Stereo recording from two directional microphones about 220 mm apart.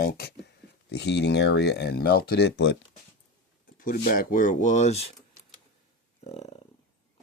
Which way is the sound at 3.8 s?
40° left (ahead or behind).